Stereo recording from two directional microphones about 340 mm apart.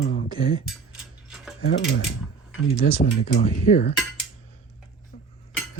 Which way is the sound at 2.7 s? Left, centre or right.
Left.